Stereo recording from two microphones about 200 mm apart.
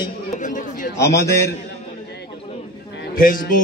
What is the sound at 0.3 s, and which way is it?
Chatter, 40° left (ahead or behind).